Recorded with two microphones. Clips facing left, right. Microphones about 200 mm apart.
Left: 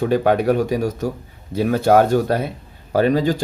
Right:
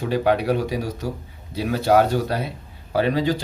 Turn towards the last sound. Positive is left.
turn(degrees=45)  # may be behind; listen again after turning